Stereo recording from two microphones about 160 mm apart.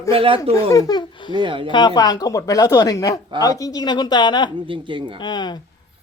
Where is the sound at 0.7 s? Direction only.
25° left (ahead or behind).